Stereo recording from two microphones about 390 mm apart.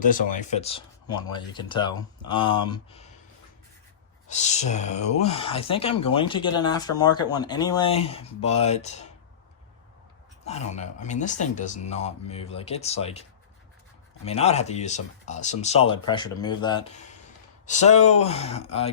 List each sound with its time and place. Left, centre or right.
0.0 s speech: centre
4.3 s speech: centre
10.4 s speech: centre
14.3 s speech: centre